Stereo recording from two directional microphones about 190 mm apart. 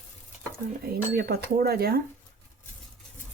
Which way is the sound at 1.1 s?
55° right (ahead or behind).